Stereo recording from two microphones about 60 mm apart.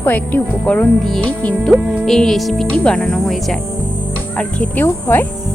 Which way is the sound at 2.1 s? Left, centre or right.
Centre.